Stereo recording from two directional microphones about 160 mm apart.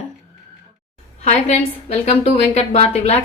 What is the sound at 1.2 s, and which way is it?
A woman's voice, 45° left (ahead or behind).